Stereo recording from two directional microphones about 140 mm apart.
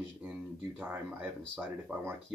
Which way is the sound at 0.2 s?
15° right (ahead or behind).